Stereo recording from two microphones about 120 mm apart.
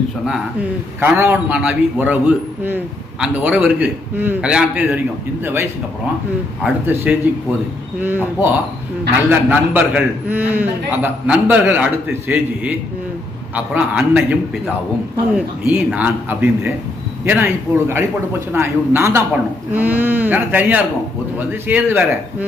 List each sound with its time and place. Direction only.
1.0 s a man's voice: 15° right (ahead or behind)
6.8 s a man's voice: 15° right (ahead or behind)
13.7 s a man's voice: 15° right (ahead or behind)